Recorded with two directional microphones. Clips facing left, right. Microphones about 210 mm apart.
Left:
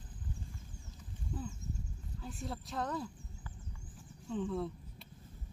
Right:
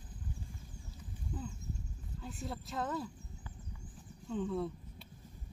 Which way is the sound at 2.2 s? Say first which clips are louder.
Even; centre (ahead or behind).